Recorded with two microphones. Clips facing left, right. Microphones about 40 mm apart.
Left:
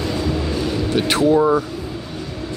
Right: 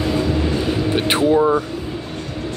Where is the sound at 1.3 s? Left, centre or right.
Centre.